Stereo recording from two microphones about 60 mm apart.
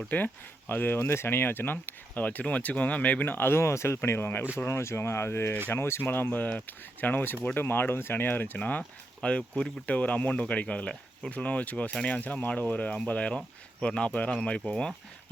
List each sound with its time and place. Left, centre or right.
0.1 s speech: left; by 14.9 s centre